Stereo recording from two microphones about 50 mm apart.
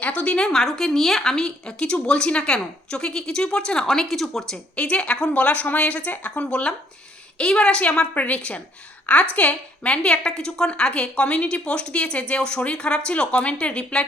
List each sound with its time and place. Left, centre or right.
0.0 s a woman's voice: left
0.4 s a woman's voice: centre
4.7 s a woman's voice: left
5.3 s a woman's voice: left
8.1 s a woman's voice: left